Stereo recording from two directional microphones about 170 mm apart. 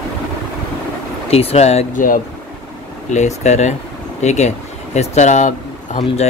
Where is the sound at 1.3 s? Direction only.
40° left (ahead or behind).